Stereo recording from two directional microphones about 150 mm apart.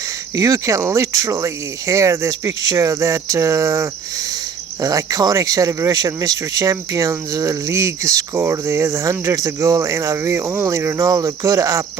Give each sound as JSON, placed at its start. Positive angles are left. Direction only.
{"t": 0.3, "sound": "speech", "side_deg": -20}